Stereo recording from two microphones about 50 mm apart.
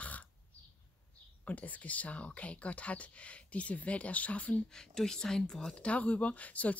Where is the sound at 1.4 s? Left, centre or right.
Left.